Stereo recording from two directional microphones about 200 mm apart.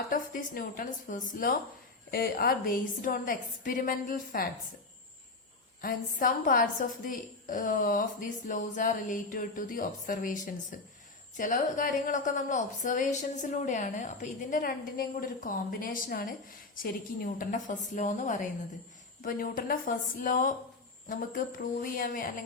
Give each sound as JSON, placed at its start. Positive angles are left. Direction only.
{"t": 0.1, "sound": "a woman's voice", "side_deg": 45}
{"t": 5.8, "sound": "a woman's voice", "side_deg": 45}